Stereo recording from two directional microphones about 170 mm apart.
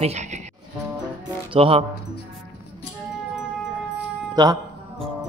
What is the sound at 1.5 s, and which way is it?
Speech, 35° right (ahead or behind).